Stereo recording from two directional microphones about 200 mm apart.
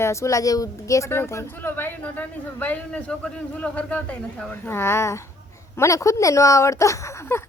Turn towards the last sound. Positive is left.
turn(degrees=10)  # may be behind; listen again after turning